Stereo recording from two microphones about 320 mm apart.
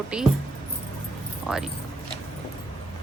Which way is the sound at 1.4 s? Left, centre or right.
Centre.